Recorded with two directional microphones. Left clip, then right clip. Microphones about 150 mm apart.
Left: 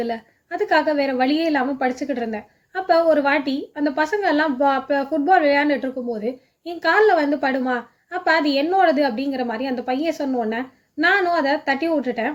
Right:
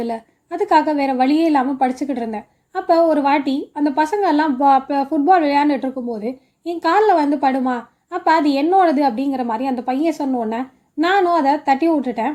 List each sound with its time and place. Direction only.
0.0 s a woman's voice: 25° right (ahead or behind)